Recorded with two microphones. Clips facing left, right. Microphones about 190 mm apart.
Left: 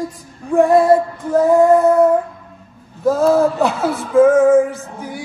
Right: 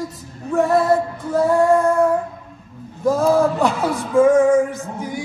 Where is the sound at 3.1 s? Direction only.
15° right (ahead or behind).